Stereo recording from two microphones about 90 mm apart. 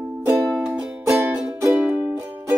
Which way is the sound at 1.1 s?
30° right (ahead or behind).